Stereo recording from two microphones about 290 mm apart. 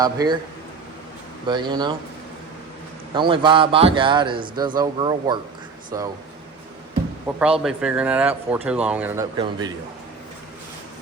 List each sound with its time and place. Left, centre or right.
0.0 s a man's voice: centre
1.5 s a man's voice: centre
3.2 s a man's voice: centre
7.3 s a man's voice: centre